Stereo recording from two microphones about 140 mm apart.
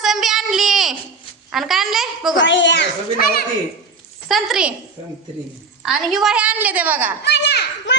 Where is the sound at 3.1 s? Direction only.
90° left.